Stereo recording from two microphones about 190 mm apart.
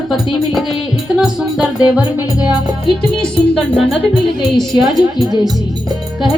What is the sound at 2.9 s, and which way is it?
Speech, 5° left (ahead or behind).